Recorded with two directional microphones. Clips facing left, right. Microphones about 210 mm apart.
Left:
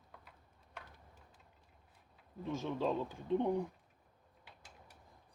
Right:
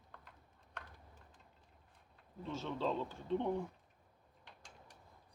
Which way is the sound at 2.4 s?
15° left (ahead or behind).